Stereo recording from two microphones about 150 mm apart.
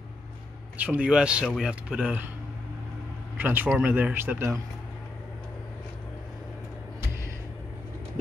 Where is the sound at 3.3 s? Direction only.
15° right (ahead or behind).